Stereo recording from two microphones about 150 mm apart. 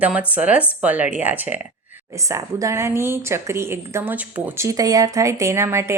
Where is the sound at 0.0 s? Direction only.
10° right (ahead or behind).